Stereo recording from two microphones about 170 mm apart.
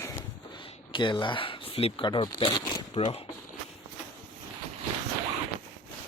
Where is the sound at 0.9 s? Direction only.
30° left (ahead or behind).